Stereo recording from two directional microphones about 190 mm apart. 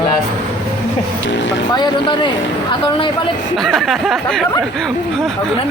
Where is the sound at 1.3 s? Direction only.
75° left (ahead or behind).